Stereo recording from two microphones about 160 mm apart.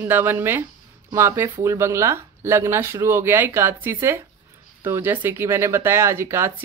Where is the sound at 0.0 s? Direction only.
15° right (ahead or behind).